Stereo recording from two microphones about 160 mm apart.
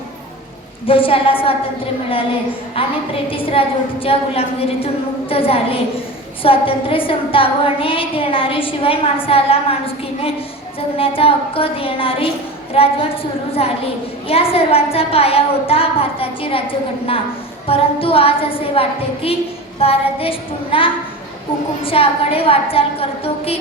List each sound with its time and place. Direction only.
0.9 s a woman's voice: 35° left (ahead or behind)
2.8 s a woman's voice: 35° left (ahead or behind)